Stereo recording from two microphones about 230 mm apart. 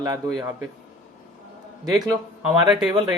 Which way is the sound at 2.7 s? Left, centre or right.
Centre.